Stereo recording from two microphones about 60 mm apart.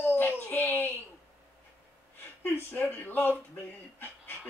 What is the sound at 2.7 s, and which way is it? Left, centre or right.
Speech, left.